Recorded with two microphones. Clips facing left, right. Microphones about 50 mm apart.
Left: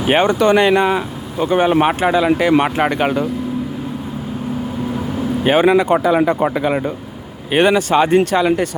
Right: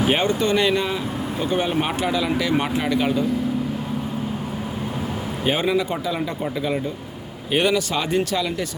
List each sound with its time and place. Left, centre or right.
0.1 s speech: left
5.5 s speech: left
7.5 s speech: left